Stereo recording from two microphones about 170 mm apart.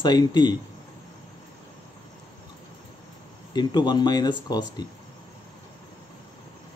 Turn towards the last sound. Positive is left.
turn(degrees=25)  # may be behind; listen again after turning